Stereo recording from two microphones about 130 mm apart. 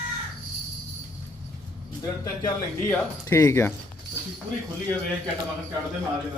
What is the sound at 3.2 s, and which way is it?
Speech, 20° left (ahead or behind).